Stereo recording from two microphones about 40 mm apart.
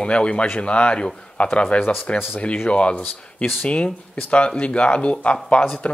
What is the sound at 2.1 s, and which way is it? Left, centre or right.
Speech, left.